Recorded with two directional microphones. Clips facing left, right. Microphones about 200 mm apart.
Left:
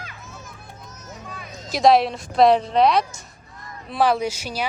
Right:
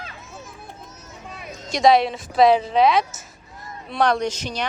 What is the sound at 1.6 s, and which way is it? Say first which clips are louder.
Speech: even; centre (ahead or behind).